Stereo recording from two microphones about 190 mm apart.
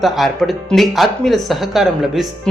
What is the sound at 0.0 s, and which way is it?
Speech, centre (ahead or behind).